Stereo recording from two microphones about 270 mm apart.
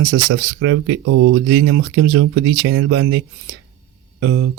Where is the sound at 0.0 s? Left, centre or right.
Right.